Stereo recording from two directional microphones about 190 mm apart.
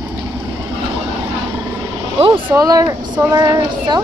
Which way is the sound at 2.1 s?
30° right (ahead or behind).